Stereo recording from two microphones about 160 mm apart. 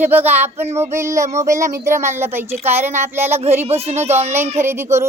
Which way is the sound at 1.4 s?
20° right (ahead or behind).